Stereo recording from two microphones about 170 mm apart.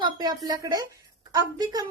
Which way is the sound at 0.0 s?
25° right (ahead or behind).